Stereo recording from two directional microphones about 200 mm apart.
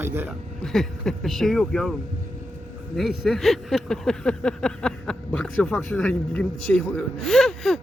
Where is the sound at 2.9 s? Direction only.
Centre (ahead or behind).